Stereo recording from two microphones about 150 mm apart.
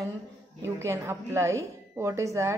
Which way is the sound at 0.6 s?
20° right (ahead or behind).